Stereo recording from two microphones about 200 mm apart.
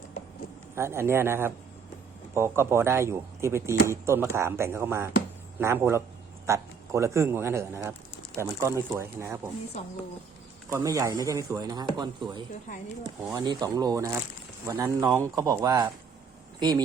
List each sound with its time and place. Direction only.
0.8 s speech: 15° right (ahead or behind)
10.7 s speech: 15° right (ahead or behind)